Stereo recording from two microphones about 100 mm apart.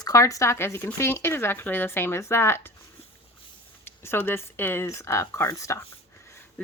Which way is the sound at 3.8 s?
20° left (ahead or behind).